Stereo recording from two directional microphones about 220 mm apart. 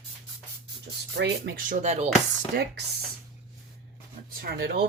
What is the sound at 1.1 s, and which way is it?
Speech, 45° right (ahead or behind).